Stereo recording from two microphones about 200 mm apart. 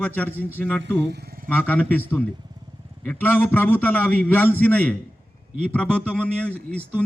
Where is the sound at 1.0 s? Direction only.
55° right (ahead or behind).